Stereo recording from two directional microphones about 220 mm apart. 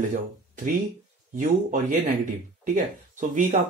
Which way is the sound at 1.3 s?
35° right (ahead or behind).